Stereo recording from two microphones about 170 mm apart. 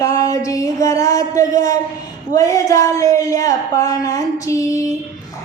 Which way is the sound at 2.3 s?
20° left (ahead or behind).